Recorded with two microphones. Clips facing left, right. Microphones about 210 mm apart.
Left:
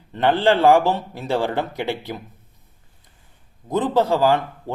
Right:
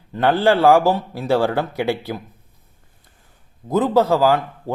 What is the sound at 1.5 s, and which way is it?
Speech, 10° right (ahead or behind).